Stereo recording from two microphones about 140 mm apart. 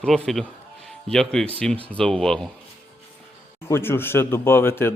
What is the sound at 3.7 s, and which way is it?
Speech, 15° left (ahead or behind).